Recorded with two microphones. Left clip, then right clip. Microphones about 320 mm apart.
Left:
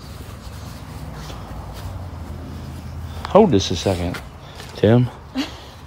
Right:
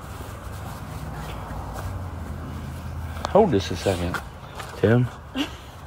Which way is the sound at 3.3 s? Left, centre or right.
Left.